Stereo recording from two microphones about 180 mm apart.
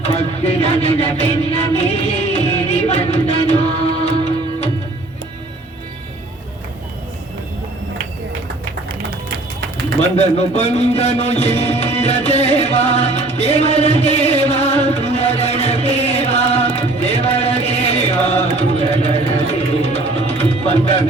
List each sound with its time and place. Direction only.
0.0 s music: 35° left (ahead or behind)
10.2 s music: 35° left (ahead or behind)
19.0 s tabla: 35° left (ahead or behind)